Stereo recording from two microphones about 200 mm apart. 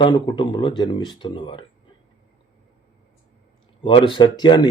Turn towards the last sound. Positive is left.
turn(degrees=20)  # may be behind; listen again after turning